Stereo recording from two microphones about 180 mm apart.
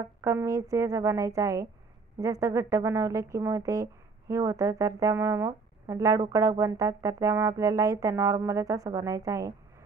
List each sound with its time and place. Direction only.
0.2 s speech: 15° right (ahead or behind)